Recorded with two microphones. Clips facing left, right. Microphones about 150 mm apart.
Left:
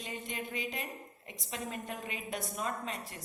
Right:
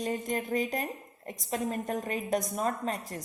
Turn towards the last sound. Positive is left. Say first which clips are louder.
# right 6 dB
turn(degrees=-45)  # may be behind; listen again after turning